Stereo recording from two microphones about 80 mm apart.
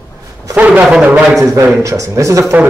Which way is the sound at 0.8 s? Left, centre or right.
Centre.